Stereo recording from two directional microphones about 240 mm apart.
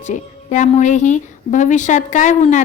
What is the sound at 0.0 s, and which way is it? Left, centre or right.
A woman's voice, left.